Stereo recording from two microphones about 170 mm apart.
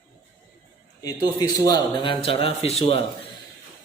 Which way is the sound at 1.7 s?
30° left (ahead or behind).